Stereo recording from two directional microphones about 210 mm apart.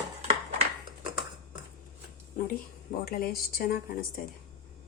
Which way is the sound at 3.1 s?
45° left (ahead or behind).